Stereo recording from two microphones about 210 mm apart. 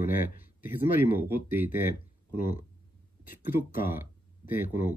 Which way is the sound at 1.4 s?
10° right (ahead or behind).